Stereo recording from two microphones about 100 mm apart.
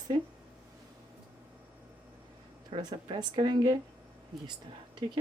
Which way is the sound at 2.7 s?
55° right (ahead or behind).